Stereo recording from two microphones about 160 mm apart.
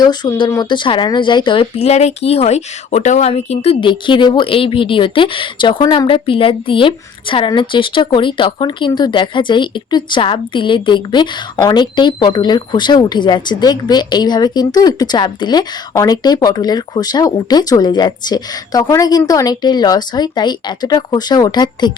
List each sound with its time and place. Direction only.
0.0 s speech: 25° left (ahead or behind)